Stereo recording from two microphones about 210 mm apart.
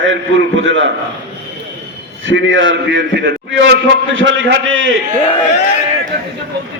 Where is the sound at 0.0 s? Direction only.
65° right (ahead or behind).